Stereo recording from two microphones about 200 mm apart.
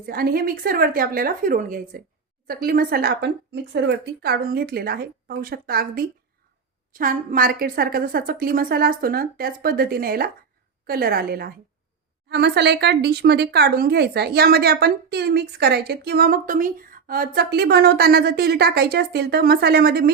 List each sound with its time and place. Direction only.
0.0 s speech: 50° right (ahead or behind)